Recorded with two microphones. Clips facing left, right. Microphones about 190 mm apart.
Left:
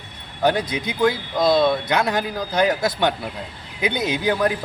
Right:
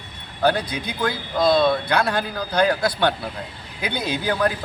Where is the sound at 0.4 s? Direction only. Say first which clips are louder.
Left 1 dB; 20° left (ahead or behind).